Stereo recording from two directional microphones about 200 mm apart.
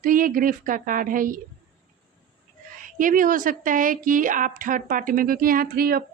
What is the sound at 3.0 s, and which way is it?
A woman's voice, 40° right (ahead or behind).